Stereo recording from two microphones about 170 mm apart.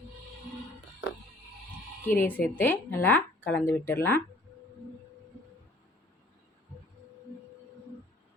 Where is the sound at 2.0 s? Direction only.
10° left (ahead or behind).